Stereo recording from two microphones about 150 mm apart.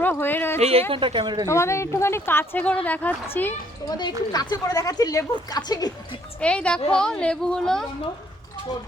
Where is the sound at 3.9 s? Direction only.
30° left (ahead or behind).